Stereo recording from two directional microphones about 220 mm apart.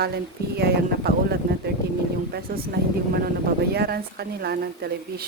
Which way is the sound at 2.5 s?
40° right (ahead or behind).